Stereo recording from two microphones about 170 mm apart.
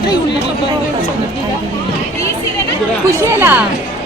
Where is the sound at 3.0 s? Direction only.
15° right (ahead or behind).